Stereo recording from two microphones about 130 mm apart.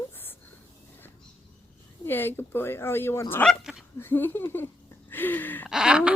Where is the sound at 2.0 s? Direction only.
15° left (ahead or behind).